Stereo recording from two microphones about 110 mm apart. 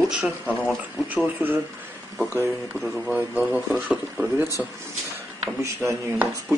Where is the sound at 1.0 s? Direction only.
15° right (ahead or behind).